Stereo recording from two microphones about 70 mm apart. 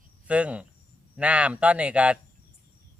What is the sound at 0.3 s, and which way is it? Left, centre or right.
Speech, centre.